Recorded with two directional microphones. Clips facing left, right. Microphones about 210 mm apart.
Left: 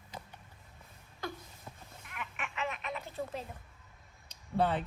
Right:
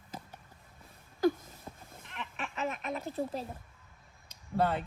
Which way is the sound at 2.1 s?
30° right (ahead or behind).